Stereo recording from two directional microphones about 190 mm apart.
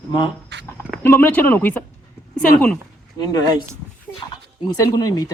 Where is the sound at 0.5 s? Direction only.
65° right (ahead or behind).